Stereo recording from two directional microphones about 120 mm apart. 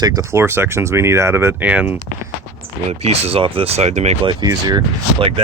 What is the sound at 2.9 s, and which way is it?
Speech, 60° right (ahead or behind).